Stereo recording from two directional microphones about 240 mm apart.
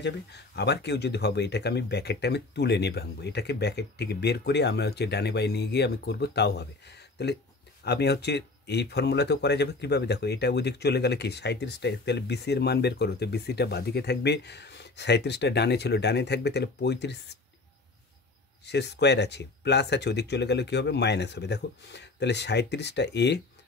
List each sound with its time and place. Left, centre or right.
0.0 s speech: left
18.7 s speech: left